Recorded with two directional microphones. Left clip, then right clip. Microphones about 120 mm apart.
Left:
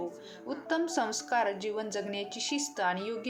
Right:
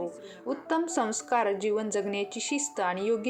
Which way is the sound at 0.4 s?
40° right (ahead or behind).